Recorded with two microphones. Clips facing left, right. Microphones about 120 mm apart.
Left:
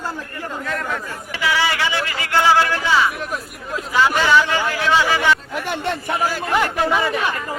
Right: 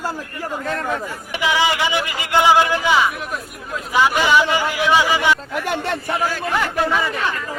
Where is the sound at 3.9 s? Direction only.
15° right (ahead or behind).